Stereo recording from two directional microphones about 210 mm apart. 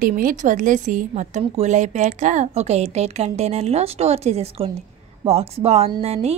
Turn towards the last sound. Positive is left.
turn(degrees=-30)  # may be behind; listen again after turning